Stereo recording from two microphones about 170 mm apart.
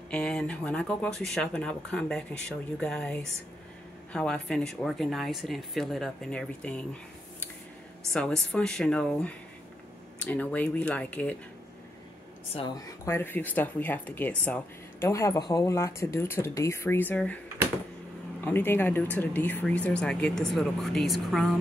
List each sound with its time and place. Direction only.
0.1 s speech: 5° left (ahead or behind)
8.5 s speech: 5° left (ahead or behind)
12.5 s speech: 25° left (ahead or behind)
18.4 s speech: 10° left (ahead or behind)